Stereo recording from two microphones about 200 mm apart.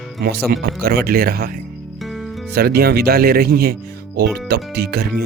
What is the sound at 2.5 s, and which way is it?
Speech, 50° right (ahead or behind).